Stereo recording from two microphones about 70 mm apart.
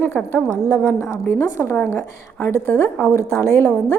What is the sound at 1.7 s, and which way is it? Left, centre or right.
A woman's voice, left.